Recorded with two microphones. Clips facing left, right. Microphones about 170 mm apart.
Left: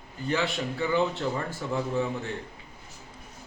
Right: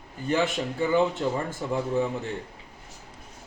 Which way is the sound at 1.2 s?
15° right (ahead or behind).